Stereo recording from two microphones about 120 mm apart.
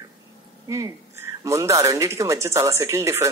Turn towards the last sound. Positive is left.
turn(degrees=-25)  # may be behind; listen again after turning